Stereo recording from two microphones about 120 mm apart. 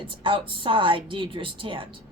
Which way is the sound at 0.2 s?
45° right (ahead or behind).